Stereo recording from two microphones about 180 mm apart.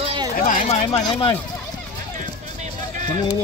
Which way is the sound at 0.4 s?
40° left (ahead or behind).